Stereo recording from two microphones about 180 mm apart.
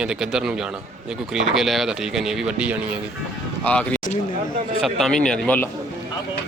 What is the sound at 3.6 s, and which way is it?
A man's voice, 5° left (ahead or behind).